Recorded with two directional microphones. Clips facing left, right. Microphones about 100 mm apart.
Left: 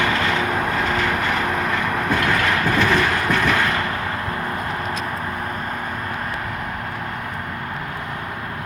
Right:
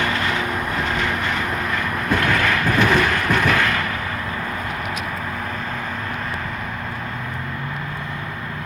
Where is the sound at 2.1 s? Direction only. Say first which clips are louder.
Right 2 dB; 20° left (ahead or behind).